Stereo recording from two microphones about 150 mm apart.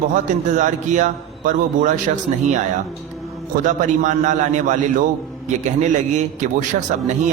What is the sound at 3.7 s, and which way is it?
A man's voice, 55° right (ahead or behind).